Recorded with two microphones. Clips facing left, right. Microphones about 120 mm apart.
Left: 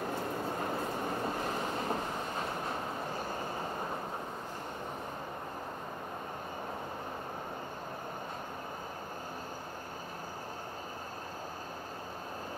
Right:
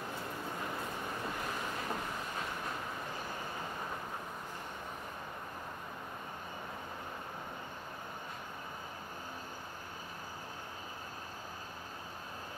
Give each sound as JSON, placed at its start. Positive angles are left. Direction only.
{"t": 0.1, "sound": "vehicle", "side_deg": 40}